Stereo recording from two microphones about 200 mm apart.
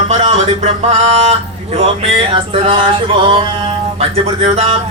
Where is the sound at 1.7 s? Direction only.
30° right (ahead or behind).